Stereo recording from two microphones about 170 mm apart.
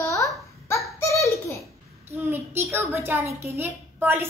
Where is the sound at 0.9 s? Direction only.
15° left (ahead or behind).